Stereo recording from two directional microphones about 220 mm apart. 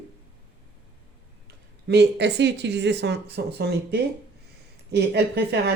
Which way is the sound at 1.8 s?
50° right (ahead or behind).